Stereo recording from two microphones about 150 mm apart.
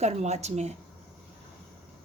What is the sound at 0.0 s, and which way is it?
Speech, 50° right (ahead or behind).